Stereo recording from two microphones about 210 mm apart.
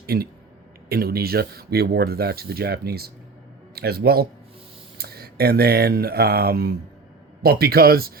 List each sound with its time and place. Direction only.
0.0 s speech: 45° right (ahead or behind)